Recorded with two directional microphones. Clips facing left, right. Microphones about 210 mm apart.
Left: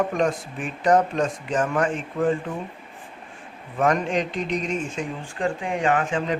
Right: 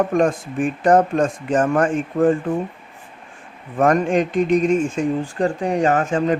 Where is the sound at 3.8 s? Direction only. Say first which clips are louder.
Right 5 dB; 50° right (ahead or behind).